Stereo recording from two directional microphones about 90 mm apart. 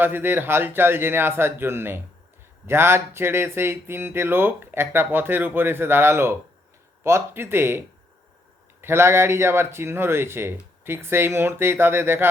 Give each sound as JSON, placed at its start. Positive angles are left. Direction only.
{"t": 0.0, "sound": "speech", "side_deg": -25}
{"t": 8.8, "sound": "speech", "side_deg": -25}